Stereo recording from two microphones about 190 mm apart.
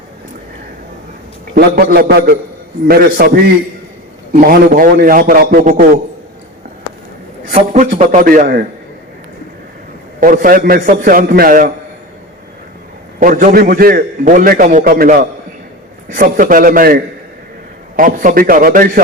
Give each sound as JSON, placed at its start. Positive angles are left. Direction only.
{"t": 1.5, "sound": "a man's voice", "side_deg": -50}
{"t": 7.5, "sound": "a man's voice", "side_deg": -40}
{"t": 10.2, "sound": "a man's voice", "side_deg": -45}
{"t": 13.1, "sound": "a man's voice", "side_deg": -45}